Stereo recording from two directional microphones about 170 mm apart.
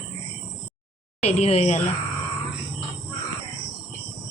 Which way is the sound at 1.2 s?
40° left (ahead or behind).